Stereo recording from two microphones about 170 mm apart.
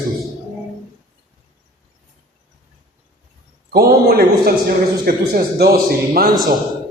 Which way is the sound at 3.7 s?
65° right (ahead or behind).